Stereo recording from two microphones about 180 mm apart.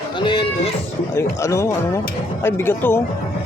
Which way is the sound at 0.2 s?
30° left (ahead or behind).